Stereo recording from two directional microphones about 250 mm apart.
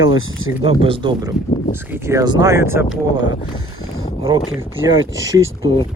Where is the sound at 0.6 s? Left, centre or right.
Right.